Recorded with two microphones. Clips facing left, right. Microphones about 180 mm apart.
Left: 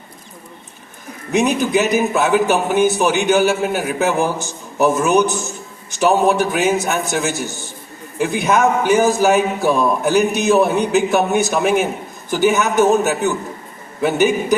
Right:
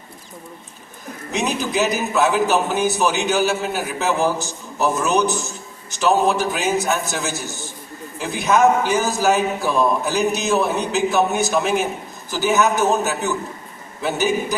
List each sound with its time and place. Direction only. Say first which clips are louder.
1.3 s a man's voice: left 7 dB; 55° left (ahead or behind)